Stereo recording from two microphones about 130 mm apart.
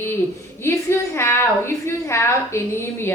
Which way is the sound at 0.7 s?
20° left (ahead or behind).